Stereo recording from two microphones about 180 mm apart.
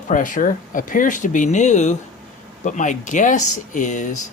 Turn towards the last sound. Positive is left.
turn(degrees=45)  # may be behind; listen again after turning